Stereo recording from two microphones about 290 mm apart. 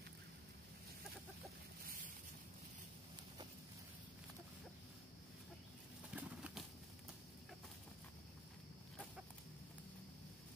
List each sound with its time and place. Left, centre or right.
6.1 s bird: centre